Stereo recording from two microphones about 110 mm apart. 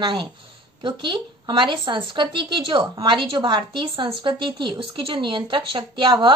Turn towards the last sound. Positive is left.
turn(degrees=-45)  # may be behind; listen again after turning